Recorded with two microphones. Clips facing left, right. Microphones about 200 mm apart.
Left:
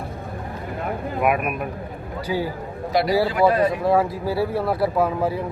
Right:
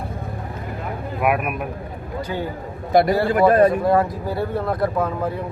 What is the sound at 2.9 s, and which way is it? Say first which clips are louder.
Speech: right 3 dB; 50° right (ahead or behind).